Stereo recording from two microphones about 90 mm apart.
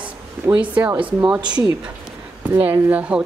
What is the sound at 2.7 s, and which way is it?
Speech, 25° right (ahead or behind).